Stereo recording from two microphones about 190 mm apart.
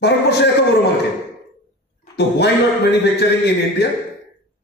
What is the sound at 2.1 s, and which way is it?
Speech, 60° left (ahead or behind).